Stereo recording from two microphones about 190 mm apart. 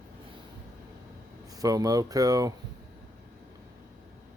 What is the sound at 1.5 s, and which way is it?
Speech, 20° right (ahead or behind).